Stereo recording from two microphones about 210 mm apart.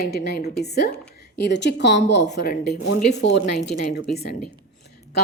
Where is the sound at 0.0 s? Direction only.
50° left (ahead or behind).